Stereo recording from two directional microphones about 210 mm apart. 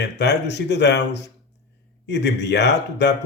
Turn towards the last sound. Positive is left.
turn(degrees=55)  # may be behind; listen again after turning